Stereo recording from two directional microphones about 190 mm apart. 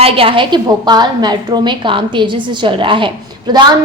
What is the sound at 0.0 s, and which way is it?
A woman's voice, 30° right (ahead or behind).